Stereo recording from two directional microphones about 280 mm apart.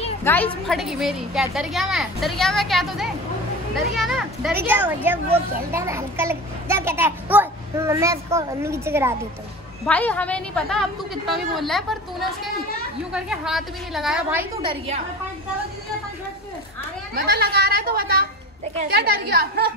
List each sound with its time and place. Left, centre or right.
0.2 s a woman's voice: centre
9.8 s a woman's voice: centre
14.6 s a child's voice: centre
17.1 s speech: right